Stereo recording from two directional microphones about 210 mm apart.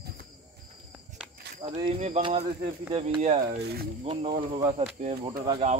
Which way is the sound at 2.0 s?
30° right (ahead or behind).